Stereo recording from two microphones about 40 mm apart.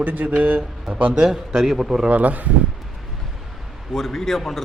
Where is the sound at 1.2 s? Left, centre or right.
Centre.